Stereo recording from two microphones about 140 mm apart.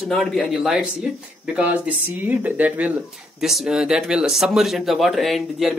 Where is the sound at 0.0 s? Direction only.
Centre (ahead or behind).